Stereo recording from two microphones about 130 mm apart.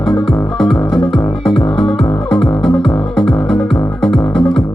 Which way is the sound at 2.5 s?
40° left (ahead or behind).